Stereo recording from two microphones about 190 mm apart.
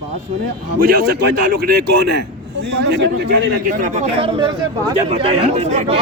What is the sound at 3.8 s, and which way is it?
A man's voice, 35° right (ahead or behind).